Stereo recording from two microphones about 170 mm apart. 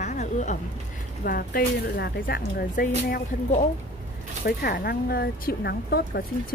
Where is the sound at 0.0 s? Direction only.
45° left (ahead or behind).